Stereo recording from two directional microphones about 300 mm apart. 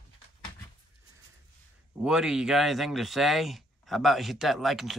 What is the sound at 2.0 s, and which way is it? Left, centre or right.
Speech, centre.